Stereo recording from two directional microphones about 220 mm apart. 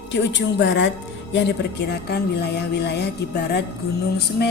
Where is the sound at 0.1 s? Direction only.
55° left (ahead or behind).